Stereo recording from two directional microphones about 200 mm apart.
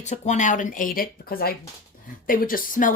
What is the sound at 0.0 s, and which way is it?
Speech, 35° left (ahead or behind).